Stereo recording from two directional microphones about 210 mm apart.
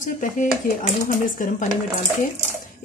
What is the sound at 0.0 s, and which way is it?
A woman's voice, 40° left (ahead or behind).